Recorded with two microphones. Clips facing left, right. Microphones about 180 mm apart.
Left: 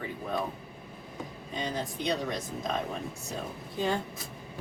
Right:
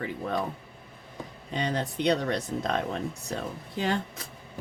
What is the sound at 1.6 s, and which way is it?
Speech, 65° right (ahead or behind).